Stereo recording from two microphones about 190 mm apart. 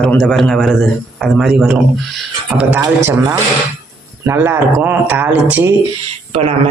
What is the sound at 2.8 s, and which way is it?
Speech, 20° right (ahead or behind).